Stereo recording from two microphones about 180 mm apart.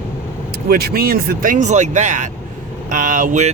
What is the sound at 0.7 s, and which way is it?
Speech, 60° right (ahead or behind).